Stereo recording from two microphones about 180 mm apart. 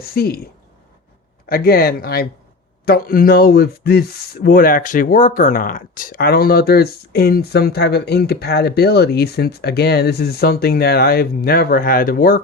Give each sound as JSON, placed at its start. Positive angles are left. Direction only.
{"t": 0.0, "sound": "speech", "side_deg": 60}
{"t": 1.5, "sound": "speech", "side_deg": 55}